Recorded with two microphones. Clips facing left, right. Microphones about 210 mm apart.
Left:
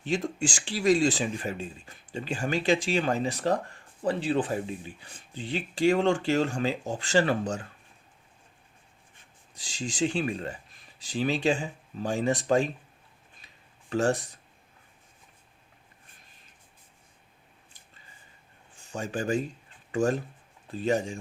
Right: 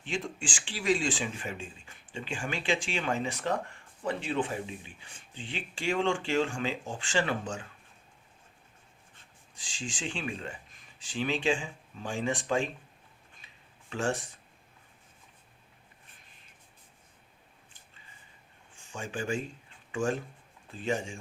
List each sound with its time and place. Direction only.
0.0 s speech: 40° left (ahead or behind)
9.6 s speech: 40° left (ahead or behind)
13.4 s a sound: 40° left (ahead or behind)
13.9 s speech: 40° left (ahead or behind)
18.9 s speech: 40° left (ahead or behind)